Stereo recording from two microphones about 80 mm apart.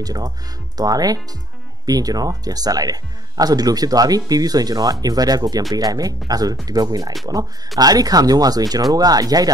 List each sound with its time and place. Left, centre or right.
0.0 s speech: right